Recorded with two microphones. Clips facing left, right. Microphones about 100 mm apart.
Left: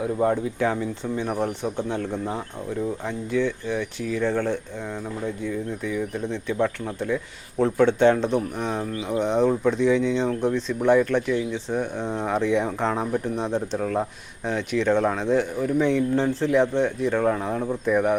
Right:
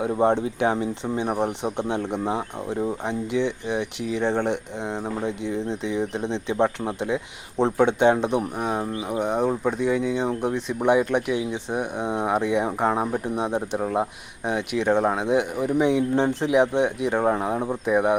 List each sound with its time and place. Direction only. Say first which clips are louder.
0.0 s speech: right 2 dB; 30° right (ahead or behind)